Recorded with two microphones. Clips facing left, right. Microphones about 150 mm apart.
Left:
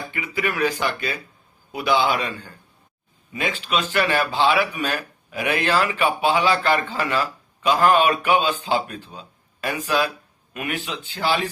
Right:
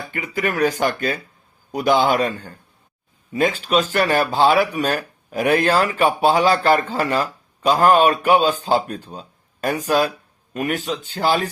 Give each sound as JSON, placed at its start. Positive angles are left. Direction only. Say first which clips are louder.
{"t": 0.1, "sound": "speech", "louder": "right 4 dB", "side_deg": -45}